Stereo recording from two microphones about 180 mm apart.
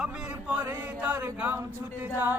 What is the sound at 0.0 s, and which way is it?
Chant, 5° right (ahead or behind).